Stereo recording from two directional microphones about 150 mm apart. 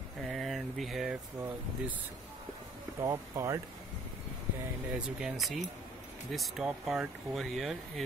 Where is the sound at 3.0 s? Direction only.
20° right (ahead or behind).